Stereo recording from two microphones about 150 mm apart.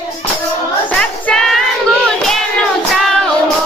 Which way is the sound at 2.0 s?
5° left (ahead or behind).